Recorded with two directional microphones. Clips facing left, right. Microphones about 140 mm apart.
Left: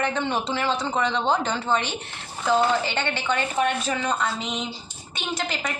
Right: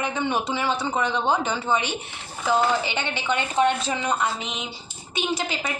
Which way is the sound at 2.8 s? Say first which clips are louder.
Left 1 dB; 15° right (ahead or behind).